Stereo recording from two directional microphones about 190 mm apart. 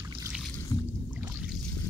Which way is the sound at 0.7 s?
15° left (ahead or behind).